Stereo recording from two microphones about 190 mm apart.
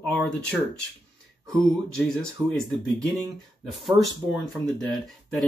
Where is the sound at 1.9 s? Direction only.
5° left (ahead or behind).